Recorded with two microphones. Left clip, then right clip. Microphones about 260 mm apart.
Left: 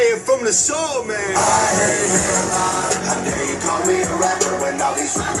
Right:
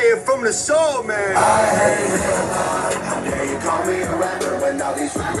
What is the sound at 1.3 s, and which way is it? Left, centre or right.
Speech, centre.